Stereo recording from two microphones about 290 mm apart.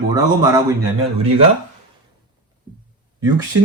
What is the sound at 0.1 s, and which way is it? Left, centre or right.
Speech, centre.